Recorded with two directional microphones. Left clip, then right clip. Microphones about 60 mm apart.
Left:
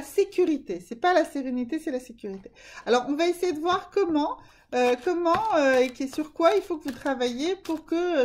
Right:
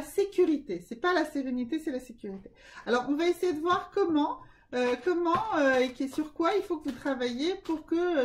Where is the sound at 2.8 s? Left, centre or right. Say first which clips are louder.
Left 4 dB; centre.